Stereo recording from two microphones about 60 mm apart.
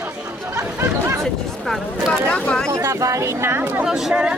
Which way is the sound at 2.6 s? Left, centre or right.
Right.